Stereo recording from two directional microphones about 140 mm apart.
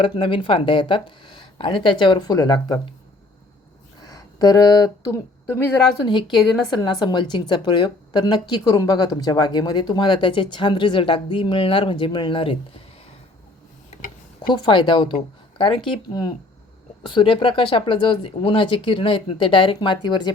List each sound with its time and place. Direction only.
0.0 s a woman's voice: 40° left (ahead or behind)
4.0 s a woman's voice: 25° left (ahead or behind)
14.4 s a woman's voice: 30° left (ahead or behind)